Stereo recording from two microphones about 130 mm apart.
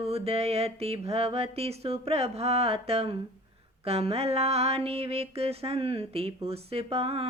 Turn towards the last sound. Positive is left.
turn(degrees=-50)  # may be behind; listen again after turning